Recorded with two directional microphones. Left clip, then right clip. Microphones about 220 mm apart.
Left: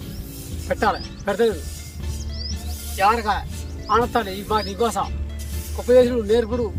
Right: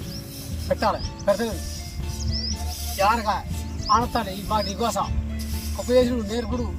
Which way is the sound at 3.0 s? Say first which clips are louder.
Left 3 dB; 30° left (ahead or behind).